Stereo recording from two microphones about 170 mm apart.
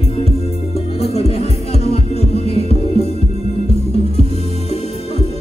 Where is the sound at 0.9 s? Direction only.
35° left (ahead or behind).